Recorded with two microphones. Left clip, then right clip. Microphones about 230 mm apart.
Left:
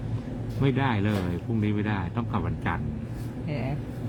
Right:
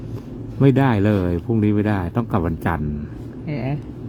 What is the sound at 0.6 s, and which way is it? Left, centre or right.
Speech, right.